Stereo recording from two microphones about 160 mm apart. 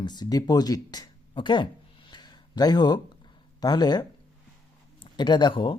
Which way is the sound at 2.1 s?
25° left (ahead or behind).